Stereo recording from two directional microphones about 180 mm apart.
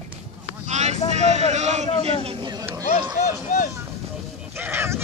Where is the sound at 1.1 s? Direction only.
40° right (ahead or behind).